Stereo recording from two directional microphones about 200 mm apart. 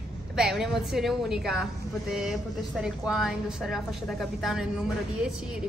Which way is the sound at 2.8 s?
Centre (ahead or behind).